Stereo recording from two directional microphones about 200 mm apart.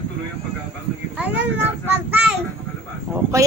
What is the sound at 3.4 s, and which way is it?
Speech, 15° right (ahead or behind).